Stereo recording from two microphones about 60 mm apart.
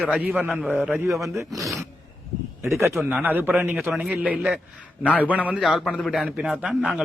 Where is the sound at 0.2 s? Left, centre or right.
Right.